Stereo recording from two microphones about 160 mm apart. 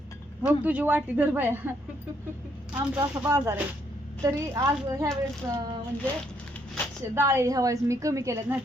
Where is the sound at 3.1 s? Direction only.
20° right (ahead or behind).